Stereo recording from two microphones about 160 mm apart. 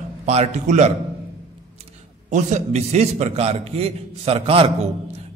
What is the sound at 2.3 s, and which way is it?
A man's voice, 50° right (ahead or behind).